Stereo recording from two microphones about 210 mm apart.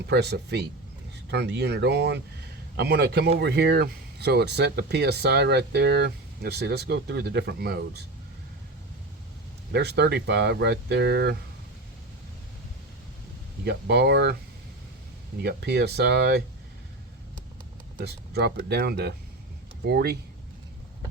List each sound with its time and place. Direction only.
0.0 s speech: 50° right (ahead or behind)
9.7 s speech: 50° right (ahead or behind)
13.7 s speech: 50° right (ahead or behind)
15.4 s speech: 50° right (ahead or behind)
17.9 s speech: 50° right (ahead or behind)